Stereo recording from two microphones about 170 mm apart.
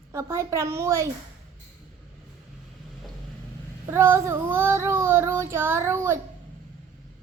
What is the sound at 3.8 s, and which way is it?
Child singing, 15° right (ahead or behind).